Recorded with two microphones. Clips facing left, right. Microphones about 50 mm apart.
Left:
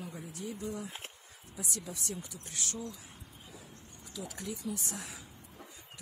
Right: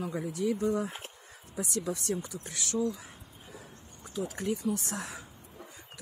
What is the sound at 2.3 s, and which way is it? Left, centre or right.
Speech, right.